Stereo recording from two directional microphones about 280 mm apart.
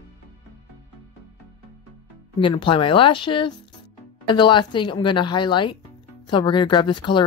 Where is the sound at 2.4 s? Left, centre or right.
Centre.